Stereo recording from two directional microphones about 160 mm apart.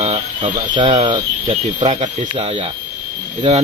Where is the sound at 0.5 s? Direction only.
25° right (ahead or behind).